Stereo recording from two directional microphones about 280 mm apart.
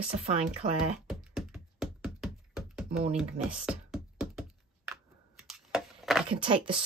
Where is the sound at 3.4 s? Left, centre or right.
Centre.